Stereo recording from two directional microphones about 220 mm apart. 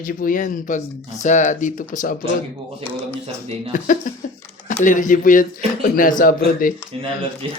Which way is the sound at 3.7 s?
35° left (ahead or behind).